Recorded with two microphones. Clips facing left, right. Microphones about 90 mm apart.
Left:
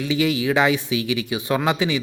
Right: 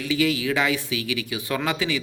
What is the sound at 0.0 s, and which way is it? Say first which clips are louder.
Speech: left 2 dB; 20° left (ahead or behind).